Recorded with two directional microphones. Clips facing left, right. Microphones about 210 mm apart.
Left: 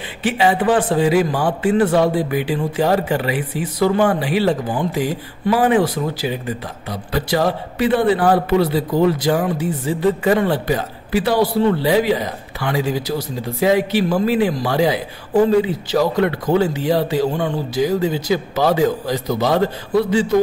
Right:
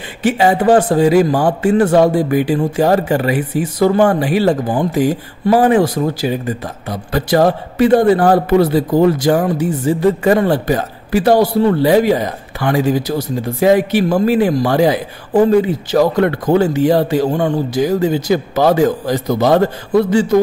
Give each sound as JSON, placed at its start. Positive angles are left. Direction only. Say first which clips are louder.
{"t": 0.2, "sound": "a man's voice", "louder": "right 4 dB", "side_deg": -45}